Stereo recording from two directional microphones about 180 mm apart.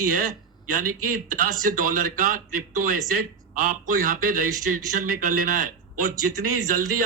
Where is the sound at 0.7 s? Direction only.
50° right (ahead or behind).